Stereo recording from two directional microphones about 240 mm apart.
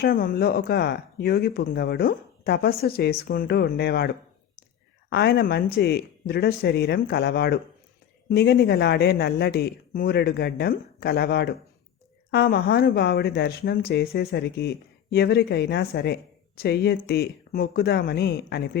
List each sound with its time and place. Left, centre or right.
0.0 s speech: left